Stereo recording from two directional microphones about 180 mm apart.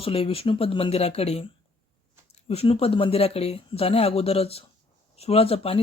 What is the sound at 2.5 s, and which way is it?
Speech, 35° left (ahead or behind).